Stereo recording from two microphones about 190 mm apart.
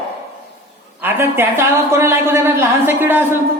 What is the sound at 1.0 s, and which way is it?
Speech, 10° right (ahead or behind).